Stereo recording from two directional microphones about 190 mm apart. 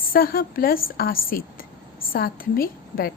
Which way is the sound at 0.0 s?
50° left (ahead or behind).